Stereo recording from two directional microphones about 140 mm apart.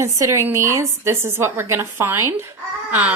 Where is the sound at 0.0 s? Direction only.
20° right (ahead or behind).